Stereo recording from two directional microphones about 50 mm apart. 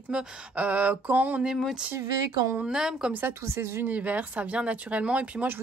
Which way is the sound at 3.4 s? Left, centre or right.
Right.